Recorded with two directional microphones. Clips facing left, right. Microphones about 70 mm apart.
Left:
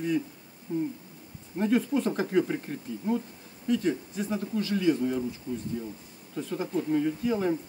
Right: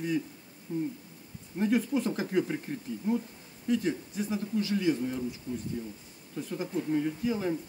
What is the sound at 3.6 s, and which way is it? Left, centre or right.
Speech, centre.